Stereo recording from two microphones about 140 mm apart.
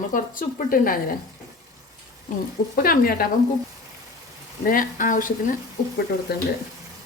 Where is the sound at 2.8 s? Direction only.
90° left.